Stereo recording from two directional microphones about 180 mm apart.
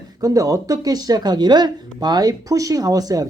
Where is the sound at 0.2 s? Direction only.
20° right (ahead or behind).